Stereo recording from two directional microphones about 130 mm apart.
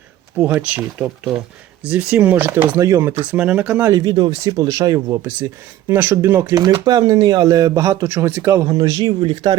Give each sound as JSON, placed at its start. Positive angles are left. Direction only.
{"t": 0.3, "sound": "speech", "side_deg": -10}
{"t": 3.9, "sound": "speech", "side_deg": -30}
{"t": 6.5, "sound": "speech", "side_deg": -30}